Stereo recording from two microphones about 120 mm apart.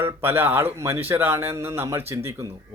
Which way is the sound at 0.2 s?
20° right (ahead or behind).